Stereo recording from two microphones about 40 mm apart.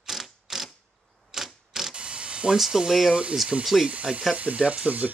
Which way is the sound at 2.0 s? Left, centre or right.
Right.